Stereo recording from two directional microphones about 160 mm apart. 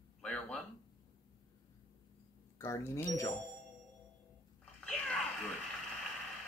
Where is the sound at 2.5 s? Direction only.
15° left (ahead or behind).